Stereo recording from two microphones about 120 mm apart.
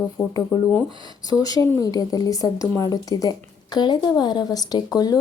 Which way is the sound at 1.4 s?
30° left (ahead or behind).